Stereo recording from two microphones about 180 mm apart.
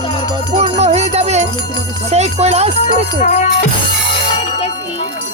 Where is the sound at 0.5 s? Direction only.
40° right (ahead or behind).